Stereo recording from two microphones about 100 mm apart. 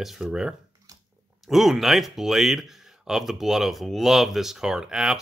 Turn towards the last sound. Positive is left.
turn(degrees=-5)  # may be behind; listen again after turning